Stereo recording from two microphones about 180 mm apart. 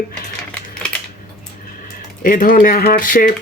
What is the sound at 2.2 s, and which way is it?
Speech, 50° left (ahead or behind).